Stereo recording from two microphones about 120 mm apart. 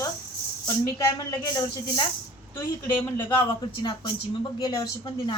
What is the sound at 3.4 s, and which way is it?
A woman's voice, 40° left (ahead or behind).